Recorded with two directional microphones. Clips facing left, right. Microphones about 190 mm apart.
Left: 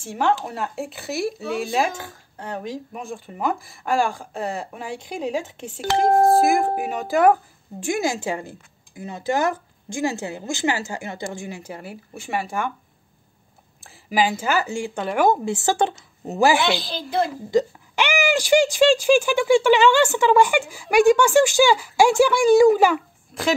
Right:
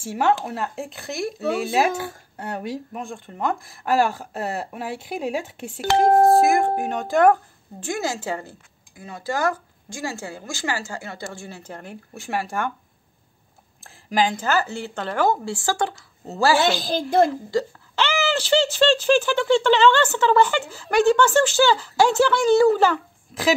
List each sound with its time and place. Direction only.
0.0 s a woman's voice: 5° right (ahead or behind)
13.8 s speech: 5° left (ahead or behind)
16.6 s a woman's voice: 45° right (ahead or behind)
17.5 s speech: 15° left (ahead or behind)
23.3 s a woman's voice: centre (ahead or behind)